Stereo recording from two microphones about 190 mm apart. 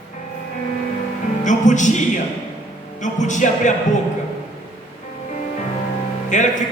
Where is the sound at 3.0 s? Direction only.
40° left (ahead or behind).